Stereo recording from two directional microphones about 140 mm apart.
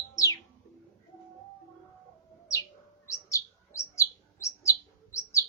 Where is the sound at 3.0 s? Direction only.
20° left (ahead or behind).